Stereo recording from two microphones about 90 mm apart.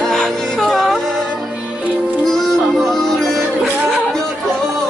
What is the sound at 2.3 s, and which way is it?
Music, 5° left (ahead or behind).